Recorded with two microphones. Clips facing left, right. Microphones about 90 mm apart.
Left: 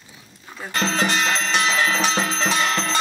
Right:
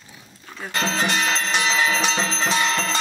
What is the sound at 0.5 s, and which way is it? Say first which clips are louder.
Speech: left 1 dB; centre (ahead or behind).